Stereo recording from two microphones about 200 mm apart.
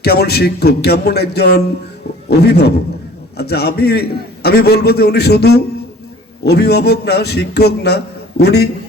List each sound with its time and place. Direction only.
0.0 s a man's voice: 55° left (ahead or behind)